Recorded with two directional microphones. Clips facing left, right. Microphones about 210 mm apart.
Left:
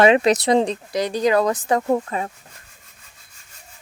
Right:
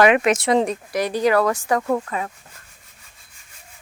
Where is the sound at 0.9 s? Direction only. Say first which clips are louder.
Even; 20° left (ahead or behind).